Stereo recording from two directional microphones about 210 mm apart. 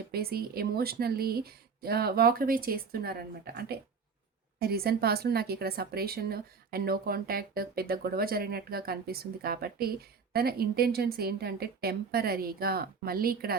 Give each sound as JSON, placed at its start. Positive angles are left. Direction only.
{"t": 0.1, "sound": "a woman's voice", "side_deg": -45}